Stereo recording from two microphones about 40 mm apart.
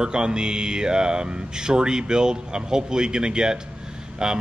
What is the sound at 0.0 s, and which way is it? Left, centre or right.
A man's voice, right.